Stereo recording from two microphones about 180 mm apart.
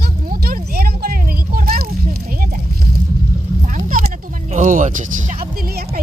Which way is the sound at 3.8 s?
50° right (ahead or behind).